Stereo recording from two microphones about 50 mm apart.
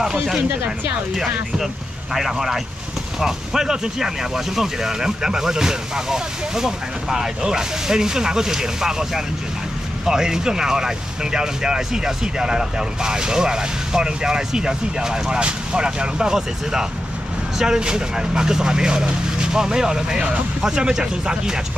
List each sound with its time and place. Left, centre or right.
0.0 s speech: centre
2.1 s speech: centre